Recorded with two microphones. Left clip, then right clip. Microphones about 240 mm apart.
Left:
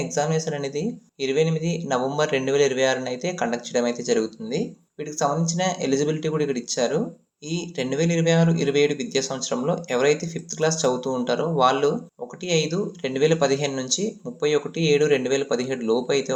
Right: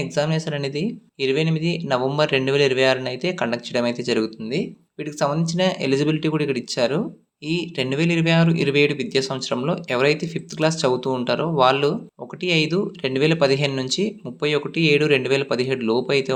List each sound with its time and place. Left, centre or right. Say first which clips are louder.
0.1 s speech: even; right
1.3 s speech: left 1 dB; right
5.4 s speech: right 3 dB; right